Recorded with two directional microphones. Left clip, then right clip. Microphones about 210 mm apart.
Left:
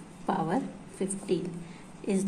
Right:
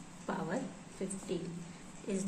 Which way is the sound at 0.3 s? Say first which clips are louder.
Left 9 dB; 40° left (ahead or behind).